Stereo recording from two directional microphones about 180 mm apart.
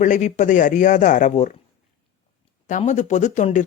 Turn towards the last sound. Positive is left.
turn(degrees=45)  # may be behind; listen again after turning